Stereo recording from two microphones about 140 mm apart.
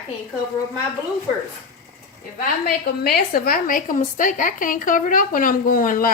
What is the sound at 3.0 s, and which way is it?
A woman's voice, 90° left.